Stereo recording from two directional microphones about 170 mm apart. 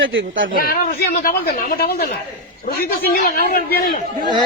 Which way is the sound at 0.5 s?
55° left (ahead or behind).